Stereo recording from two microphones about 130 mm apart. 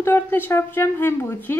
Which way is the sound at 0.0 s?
15° left (ahead or behind).